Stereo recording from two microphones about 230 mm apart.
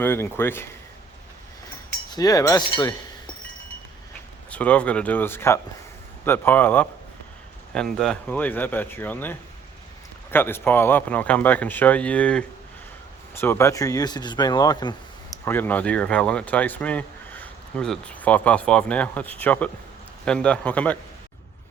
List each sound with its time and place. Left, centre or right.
0.0 s speech: centre
2.0 s speech: centre
4.5 s a man's voice: centre